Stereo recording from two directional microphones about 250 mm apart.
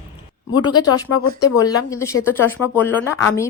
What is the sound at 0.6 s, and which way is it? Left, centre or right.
Speech, centre.